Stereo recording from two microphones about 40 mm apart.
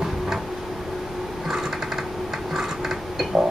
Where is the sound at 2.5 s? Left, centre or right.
Centre.